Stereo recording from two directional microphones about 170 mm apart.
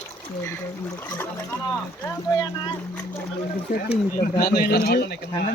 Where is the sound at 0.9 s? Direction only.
15° left (ahead or behind).